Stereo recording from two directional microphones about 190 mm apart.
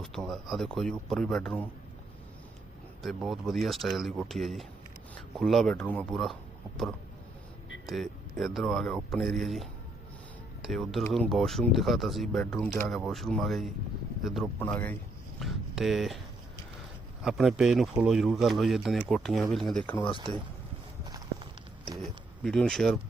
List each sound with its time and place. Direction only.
0.0 s speech: centre (ahead or behind)
3.0 s speech: centre (ahead or behind)
7.9 s speech: centre (ahead or behind)
17.2 s speech: centre (ahead or behind)
20.1 s speech: 25° right (ahead or behind)
21.0 s walk: 20° right (ahead or behind)
21.9 s speech: centre (ahead or behind)